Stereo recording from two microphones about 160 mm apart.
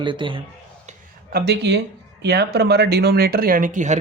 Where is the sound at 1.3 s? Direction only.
85° right; by 3.9 s 50° right (ahead or behind).